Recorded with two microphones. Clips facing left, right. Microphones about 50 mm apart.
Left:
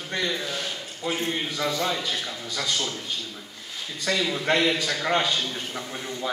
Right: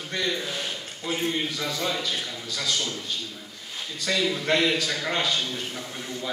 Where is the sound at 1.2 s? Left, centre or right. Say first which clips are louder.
Right 1 dB; centre.